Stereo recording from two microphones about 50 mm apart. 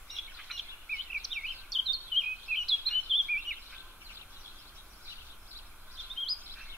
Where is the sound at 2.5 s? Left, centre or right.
Centre.